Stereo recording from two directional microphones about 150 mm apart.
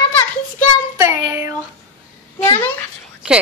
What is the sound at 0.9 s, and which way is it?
Child singing, 20° right (ahead or behind).